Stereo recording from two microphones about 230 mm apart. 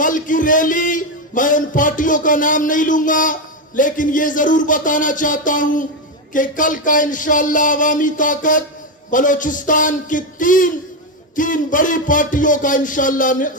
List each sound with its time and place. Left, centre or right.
0.0 s a man's voice: left